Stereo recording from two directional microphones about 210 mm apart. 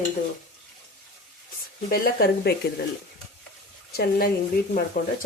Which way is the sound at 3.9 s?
45° left (ahead or behind).